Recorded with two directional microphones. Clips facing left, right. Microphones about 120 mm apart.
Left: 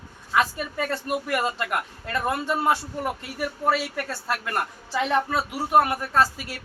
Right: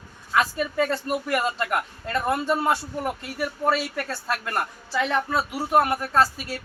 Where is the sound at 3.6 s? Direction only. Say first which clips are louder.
Even; 10° left (ahead or behind).